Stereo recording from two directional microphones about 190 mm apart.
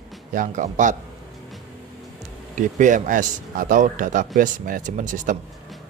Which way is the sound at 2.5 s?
40° right (ahead or behind).